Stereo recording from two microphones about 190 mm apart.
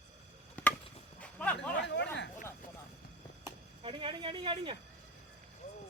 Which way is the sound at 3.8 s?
30° right (ahead or behind).